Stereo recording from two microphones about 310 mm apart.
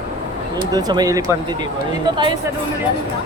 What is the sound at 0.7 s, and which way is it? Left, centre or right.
Speech, centre.